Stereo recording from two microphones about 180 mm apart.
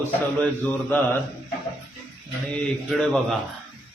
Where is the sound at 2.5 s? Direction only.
Centre (ahead or behind).